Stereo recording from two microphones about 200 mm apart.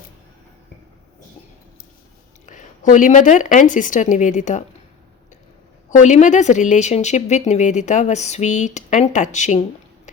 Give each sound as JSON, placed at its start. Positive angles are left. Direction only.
{"t": 2.5, "sound": "speech", "side_deg": 40}
{"t": 5.9, "sound": "speech", "side_deg": 35}